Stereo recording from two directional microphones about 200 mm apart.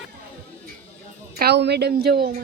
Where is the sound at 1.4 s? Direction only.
55° right (ahead or behind).